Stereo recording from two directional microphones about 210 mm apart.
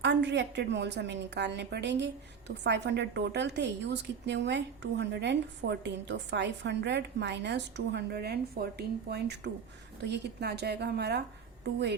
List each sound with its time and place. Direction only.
0.0 s a woman's voice: 55° right (ahead or behind)